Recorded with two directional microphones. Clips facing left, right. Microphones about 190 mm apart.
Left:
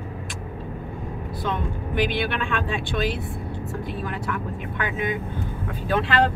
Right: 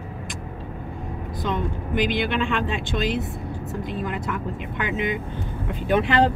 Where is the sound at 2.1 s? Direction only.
15° right (ahead or behind).